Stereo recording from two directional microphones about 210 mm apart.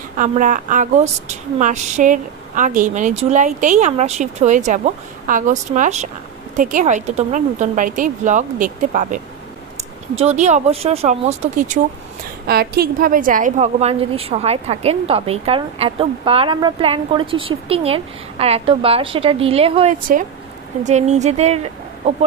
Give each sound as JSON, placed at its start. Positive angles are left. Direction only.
{"t": 0.2, "sound": "a woman's voice", "side_deg": -40}
{"t": 12.4, "sound": "a woman's voice", "side_deg": -45}